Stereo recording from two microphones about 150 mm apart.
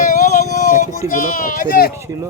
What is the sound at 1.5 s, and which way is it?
Speech, 70° left (ahead or behind).